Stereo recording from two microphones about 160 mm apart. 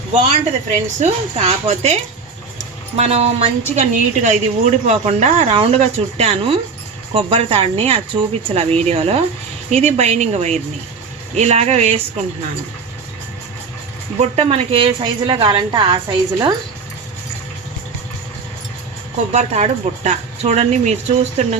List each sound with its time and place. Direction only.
0.7 s a woman's voice: 45° right (ahead or behind)
14.2 s a woman's voice: 40° right (ahead or behind)
19.3 s speech: 45° right (ahead or behind)